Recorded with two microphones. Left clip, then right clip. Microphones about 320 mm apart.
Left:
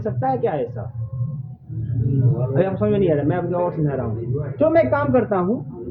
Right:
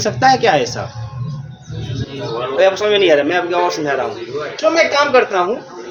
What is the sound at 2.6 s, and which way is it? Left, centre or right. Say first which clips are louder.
Speech: right 8 dB; right.